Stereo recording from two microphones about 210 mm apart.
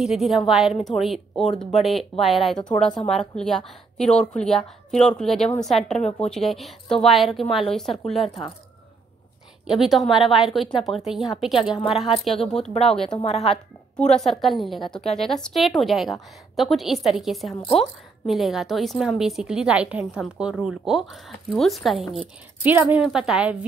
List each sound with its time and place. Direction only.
0.0 s a woman's voice: centre (ahead or behind)
9.7 s a woman's voice: centre (ahead or behind)
13.1 s speech: 30° left (ahead or behind)
14.1 s a woman's voice: centre (ahead or behind)